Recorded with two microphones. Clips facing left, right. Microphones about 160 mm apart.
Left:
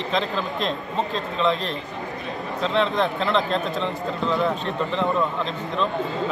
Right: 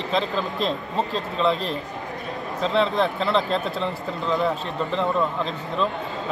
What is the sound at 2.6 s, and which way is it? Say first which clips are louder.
Speech: right 1 dB; centre (ahead or behind).